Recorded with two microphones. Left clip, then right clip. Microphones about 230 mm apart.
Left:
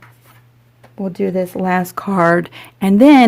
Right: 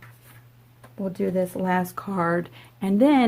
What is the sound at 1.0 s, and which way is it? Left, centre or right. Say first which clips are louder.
Speech: left 6 dB; left.